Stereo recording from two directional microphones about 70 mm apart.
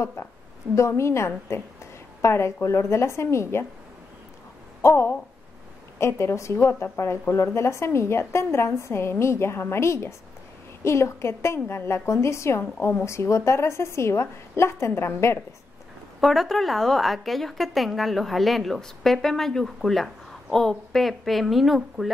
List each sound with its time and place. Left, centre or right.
0.0 s speech: left
4.8 s speech: left
16.2 s a woman's voice: centre